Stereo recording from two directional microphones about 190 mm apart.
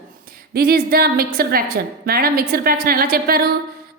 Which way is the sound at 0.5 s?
50° right (ahead or behind).